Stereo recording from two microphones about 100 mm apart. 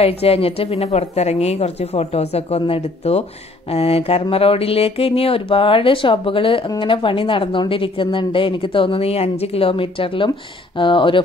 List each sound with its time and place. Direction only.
0.0 s speech: 80° left
0.9 s a woman's voice: 90° left
2.6 s a woman's voice: 80° left; by 11.2 s 55° left (ahead or behind)